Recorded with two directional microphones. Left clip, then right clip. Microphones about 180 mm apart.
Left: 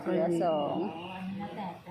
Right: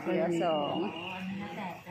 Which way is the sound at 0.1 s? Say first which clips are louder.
Left 1 dB; 15° left (ahead or behind).